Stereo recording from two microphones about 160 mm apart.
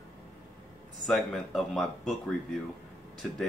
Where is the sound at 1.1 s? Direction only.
Centre (ahead or behind).